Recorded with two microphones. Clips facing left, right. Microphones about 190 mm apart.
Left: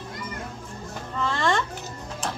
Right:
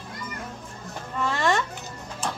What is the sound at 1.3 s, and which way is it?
Music, 15° right (ahead or behind).